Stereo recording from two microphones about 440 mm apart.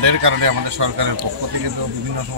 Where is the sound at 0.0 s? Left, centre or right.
Right.